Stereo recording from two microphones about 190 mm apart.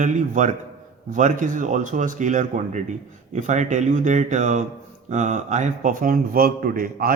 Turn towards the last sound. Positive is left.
turn(degrees=-50)  # may be behind; listen again after turning